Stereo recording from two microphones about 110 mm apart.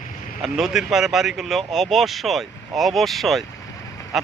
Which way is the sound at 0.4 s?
5° right (ahead or behind).